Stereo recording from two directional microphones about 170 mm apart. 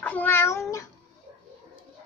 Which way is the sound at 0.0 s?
10° left (ahead or behind).